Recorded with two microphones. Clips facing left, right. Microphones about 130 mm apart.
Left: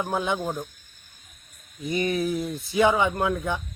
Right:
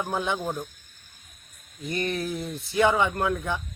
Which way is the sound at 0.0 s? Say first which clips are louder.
Left 2 dB; 5° left (ahead or behind).